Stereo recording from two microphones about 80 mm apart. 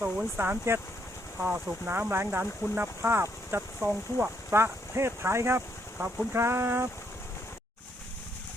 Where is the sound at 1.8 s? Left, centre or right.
Right.